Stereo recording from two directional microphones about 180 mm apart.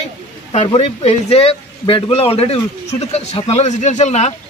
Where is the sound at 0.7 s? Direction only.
30° left (ahead or behind).